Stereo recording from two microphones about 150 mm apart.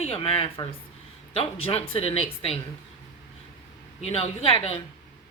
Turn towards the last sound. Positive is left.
turn(degrees=40)  # may be behind; listen again after turning